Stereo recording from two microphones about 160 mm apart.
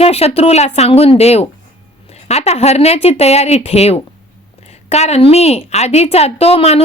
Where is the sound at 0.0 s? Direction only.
40° left (ahead or behind).